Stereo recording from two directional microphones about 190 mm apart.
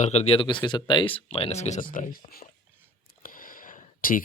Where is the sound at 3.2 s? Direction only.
50° left (ahead or behind).